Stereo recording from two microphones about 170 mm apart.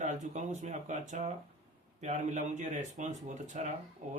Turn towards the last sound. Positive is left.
turn(degrees=-45)  # may be behind; listen again after turning